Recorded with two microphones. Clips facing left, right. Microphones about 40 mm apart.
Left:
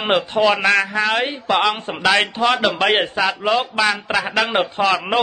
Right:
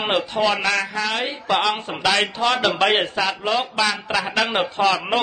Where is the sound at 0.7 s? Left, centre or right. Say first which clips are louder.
Left 5 dB; left.